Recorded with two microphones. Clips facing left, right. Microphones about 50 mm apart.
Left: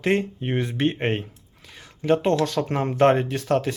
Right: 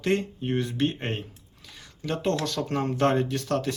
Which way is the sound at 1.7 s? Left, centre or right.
Left.